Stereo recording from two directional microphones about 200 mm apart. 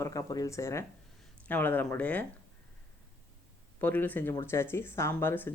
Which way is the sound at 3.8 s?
10° left (ahead or behind).